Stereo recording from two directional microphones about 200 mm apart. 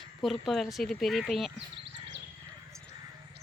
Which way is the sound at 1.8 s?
65° right (ahead or behind).